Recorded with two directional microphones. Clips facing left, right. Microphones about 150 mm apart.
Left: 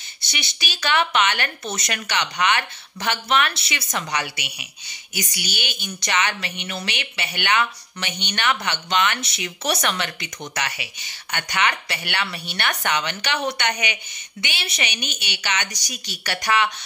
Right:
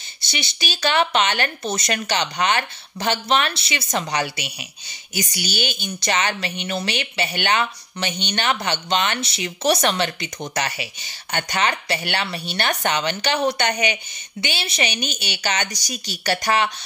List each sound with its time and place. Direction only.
0.2 s speech: 30° right (ahead or behind)